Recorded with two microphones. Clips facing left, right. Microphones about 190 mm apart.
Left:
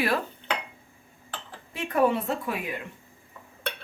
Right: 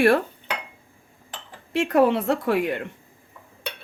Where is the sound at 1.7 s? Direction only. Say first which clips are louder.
Right 5 dB; 85° right.